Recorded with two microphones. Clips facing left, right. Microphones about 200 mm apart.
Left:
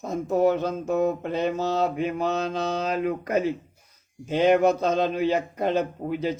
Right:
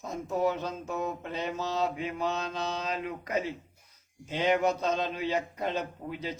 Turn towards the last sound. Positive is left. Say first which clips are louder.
# left 9 dB
turn(degrees=55)  # may be behind; listen again after turning